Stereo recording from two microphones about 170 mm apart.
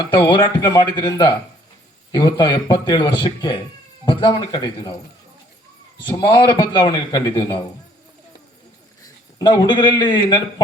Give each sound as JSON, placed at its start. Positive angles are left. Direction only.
{"t": 0.0, "sound": "a man's voice", "side_deg": 30}
{"t": 6.0, "sound": "a man's voice", "side_deg": 25}
{"t": 9.0, "sound": "a man's voice", "side_deg": 25}